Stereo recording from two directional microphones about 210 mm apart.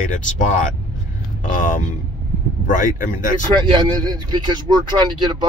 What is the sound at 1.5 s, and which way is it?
Speech, 40° left (ahead or behind).